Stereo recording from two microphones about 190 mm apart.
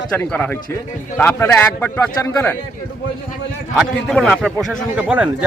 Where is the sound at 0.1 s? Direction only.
5° left (ahead or behind).